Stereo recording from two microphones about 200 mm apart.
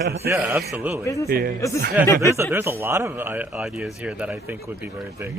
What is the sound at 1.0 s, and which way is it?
Speech, 15° left (ahead or behind).